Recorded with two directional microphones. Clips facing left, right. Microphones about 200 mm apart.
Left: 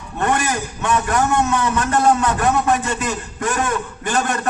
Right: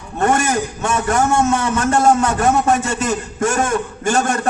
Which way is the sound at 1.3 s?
45° right (ahead or behind).